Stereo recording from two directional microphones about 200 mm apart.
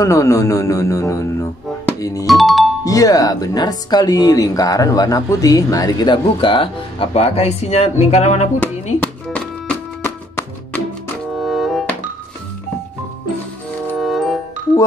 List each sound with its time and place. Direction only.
0.0 s speech: 15° left (ahead or behind)
2.2 s speech: centre (ahead or behind)
2.8 s speech: 15° left (ahead or behind); by 8.5 s 35° left (ahead or behind)
10.0 s music: 10° left (ahead or behind)
13.9 s music: centre (ahead or behind)